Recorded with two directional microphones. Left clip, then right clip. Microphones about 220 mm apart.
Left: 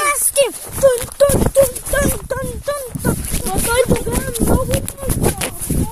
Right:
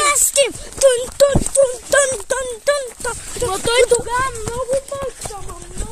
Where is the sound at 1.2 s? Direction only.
30° right (ahead or behind).